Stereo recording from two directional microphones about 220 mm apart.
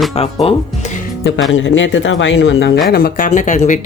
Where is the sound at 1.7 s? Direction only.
60° left (ahead or behind).